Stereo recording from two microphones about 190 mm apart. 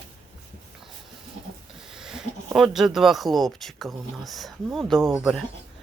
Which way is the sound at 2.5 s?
Centre (ahead or behind).